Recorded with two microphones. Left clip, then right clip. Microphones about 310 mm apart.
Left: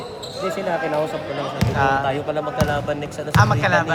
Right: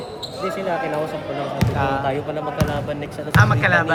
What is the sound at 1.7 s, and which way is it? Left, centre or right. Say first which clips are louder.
Speech: left 4 dB; left.